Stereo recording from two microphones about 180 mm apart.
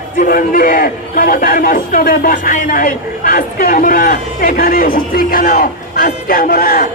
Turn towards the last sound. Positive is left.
turn(degrees=50)  # may be behind; listen again after turning